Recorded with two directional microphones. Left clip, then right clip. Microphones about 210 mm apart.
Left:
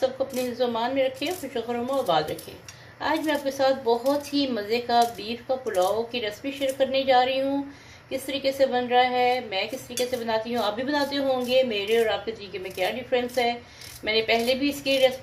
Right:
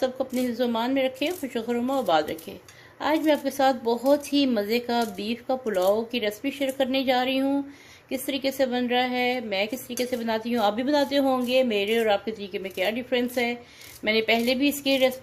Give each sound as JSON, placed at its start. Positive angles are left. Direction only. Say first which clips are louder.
{"t": 0.0, "sound": "a woman's voice", "louder": "left 1 dB", "side_deg": -50}